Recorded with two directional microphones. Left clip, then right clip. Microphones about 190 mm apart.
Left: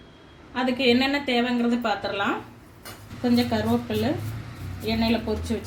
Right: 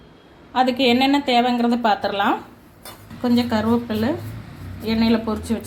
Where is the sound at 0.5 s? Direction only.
45° right (ahead or behind).